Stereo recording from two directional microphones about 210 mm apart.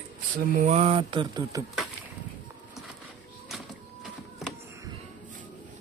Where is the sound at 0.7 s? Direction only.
25° right (ahead or behind).